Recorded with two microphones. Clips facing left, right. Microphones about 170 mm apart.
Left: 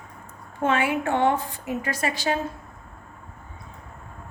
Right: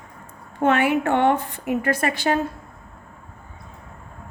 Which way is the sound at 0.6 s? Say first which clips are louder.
Right 4 dB; 65° right (ahead or behind).